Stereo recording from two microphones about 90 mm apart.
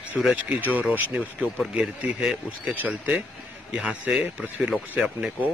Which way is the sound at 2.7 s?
15° right (ahead or behind).